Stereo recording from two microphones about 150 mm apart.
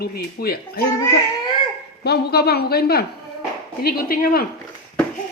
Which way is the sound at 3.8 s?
80° left.